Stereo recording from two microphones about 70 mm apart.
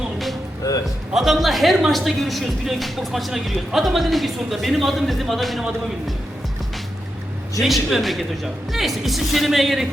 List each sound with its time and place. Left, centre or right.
0.6 s a sound: left
1.1 s speech: centre
7.6 s speech: centre